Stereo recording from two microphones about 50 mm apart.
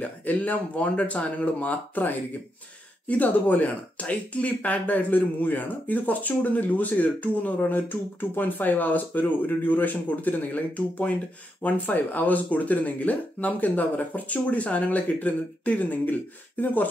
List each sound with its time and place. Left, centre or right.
0.2 s speech: left